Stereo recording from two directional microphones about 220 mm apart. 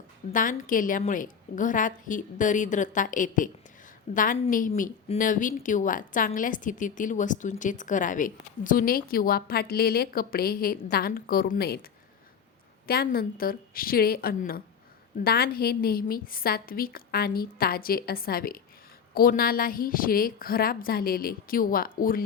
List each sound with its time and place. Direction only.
0.3 s a woman's voice: 35° left (ahead or behind)
12.9 s a woman's voice: 45° left (ahead or behind)